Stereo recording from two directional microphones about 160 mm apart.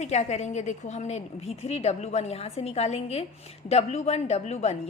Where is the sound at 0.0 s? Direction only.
45° left (ahead or behind).